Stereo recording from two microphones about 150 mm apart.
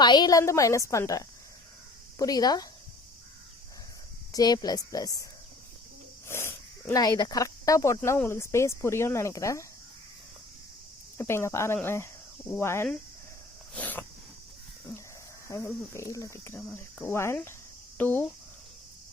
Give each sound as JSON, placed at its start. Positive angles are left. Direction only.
{"t": 0.0, "sound": "speech", "side_deg": 30}
{"t": 4.3, "sound": "speech", "side_deg": 25}
{"t": 6.2, "sound": "a sound", "side_deg": 15}
{"t": 7.0, "sound": "speech", "side_deg": 25}
{"t": 11.2, "sound": "speech", "side_deg": 15}
{"t": 13.7, "sound": "a sound", "side_deg": 10}
{"t": 15.4, "sound": "speech", "side_deg": 20}